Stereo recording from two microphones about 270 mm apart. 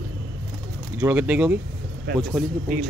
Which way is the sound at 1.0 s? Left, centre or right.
Centre.